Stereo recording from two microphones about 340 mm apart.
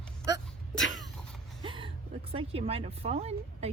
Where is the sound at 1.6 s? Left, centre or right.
Centre.